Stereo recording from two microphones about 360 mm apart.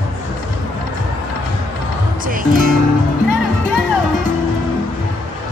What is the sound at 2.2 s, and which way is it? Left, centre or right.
Speech, right.